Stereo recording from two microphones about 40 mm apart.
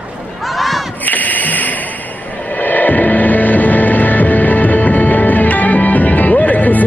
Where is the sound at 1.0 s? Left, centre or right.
Left.